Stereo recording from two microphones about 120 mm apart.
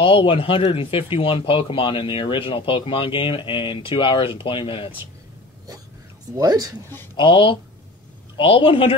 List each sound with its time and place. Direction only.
0.0 s speech: 45° left (ahead or behind)
6.3 s speech: 30° right (ahead or behind)
7.2 s speech: 45° left (ahead or behind)